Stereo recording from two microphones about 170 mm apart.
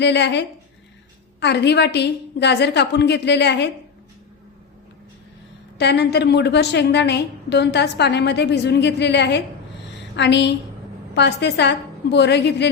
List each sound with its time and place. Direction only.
0.0 s a woman's voice: 90° left
5.7 s a woman's voice: 80° left